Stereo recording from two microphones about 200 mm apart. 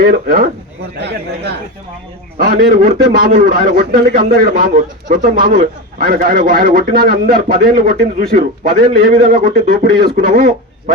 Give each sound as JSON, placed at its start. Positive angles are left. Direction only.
{"t": 0.0, "sound": "a man's voice", "side_deg": -45}
{"t": 0.9, "sound": "speech", "side_deg": -55}
{"t": 2.4, "sound": "a man's voice", "side_deg": -45}